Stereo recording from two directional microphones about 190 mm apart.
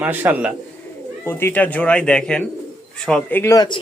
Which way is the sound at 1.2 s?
10° left (ahead or behind).